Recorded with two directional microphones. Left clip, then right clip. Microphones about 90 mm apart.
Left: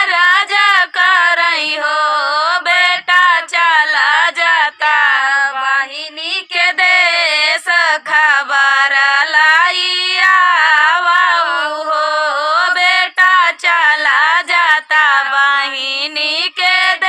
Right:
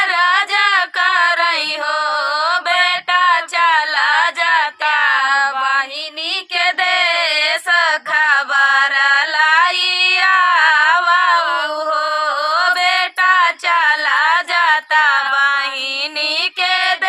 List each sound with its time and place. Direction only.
0.0 s a sound: 25° left (ahead or behind)
2.1 s music: 25° left (ahead or behind)
5.0 s mantra: 60° right (ahead or behind)
6.6 s female singing: 35° left (ahead or behind)
12.5 s female singing: 25° left (ahead or behind)